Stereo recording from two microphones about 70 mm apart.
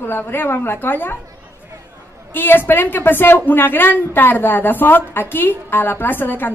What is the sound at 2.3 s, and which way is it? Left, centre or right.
A woman's voice, left.